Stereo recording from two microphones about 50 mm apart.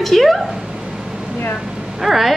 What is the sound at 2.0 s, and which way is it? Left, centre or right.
Speech, centre.